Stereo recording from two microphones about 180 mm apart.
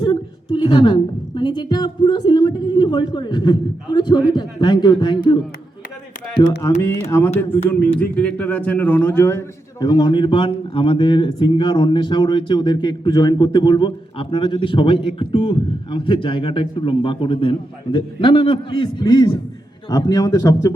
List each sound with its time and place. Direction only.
0.6 s a woman's voice: 25° left (ahead or behind)
6.8 s a man's voice: 15° left (ahead or behind)